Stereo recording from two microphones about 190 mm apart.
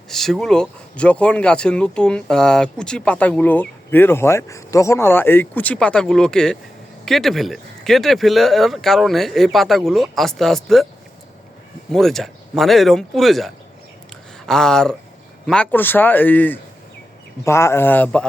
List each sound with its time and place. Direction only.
0.1 s speech: centre (ahead or behind)
11.9 s speech: centre (ahead or behind)